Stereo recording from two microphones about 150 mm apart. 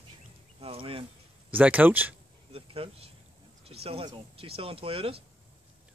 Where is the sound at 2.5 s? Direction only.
40° right (ahead or behind).